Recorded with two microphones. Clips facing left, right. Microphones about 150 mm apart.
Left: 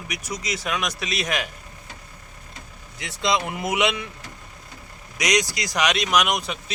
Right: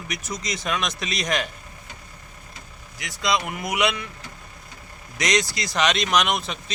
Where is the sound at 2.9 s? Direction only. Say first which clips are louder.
Left 1 dB; 25° left (ahead or behind).